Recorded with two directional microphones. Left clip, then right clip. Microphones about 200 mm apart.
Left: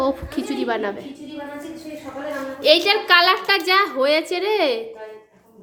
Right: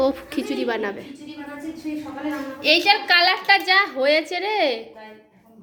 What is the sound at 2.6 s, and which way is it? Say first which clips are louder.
A woman's voice: left 2 dB; 10° left (ahead or behind).